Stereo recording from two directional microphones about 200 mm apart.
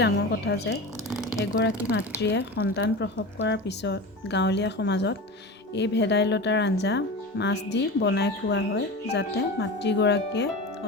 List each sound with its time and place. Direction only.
0.0 s speech: 55° left (ahead or behind)